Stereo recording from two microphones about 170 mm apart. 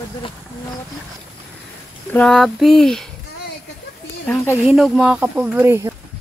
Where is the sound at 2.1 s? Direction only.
5° left (ahead or behind).